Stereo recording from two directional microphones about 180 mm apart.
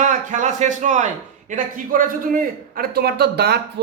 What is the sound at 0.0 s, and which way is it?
A man's voice, 45° right (ahead or behind).